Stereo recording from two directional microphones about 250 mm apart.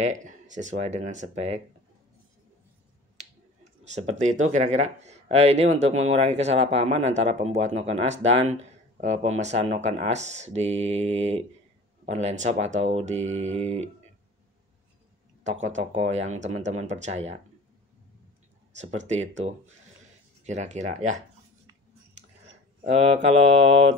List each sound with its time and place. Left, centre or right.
0.0 s speech: right
3.8 s speech: right
15.6 s speech: right
18.8 s speech: right
20.4 s speech: right
22.8 s speech: right